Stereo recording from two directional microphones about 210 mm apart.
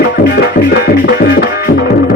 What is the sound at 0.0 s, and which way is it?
Music, 50° left (ahead or behind).